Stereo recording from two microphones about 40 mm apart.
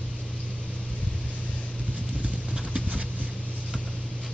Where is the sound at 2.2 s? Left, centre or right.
Right.